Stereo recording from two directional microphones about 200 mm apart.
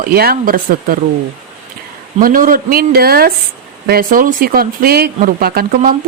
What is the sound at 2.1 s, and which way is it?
Speech, 45° right (ahead or behind).